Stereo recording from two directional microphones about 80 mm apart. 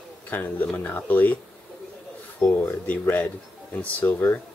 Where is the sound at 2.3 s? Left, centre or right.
Left.